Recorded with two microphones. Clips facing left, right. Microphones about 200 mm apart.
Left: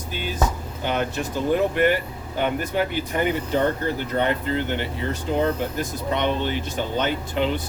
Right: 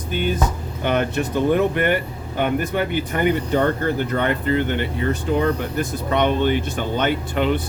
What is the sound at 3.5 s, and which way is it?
Speech, 55° right (ahead or behind).